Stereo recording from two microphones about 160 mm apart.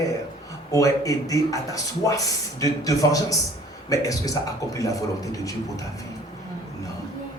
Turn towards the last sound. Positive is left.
turn(degrees=20)  # may be behind; listen again after turning